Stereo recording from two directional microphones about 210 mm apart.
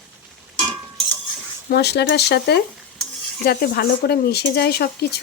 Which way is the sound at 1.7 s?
50° left (ahead or behind).